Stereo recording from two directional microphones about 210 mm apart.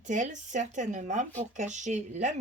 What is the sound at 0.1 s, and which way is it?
Speech, 35° right (ahead or behind).